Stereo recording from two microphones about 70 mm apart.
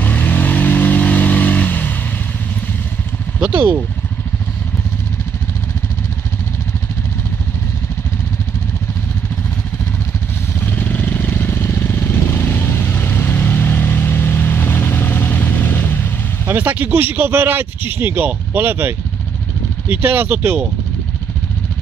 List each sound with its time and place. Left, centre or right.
0.0 s vehicle: left
3.5 s speech: right
10.6 s vehicle: left
16.4 s speech: right